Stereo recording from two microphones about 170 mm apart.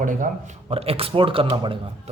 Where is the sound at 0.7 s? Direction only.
35° right (ahead or behind).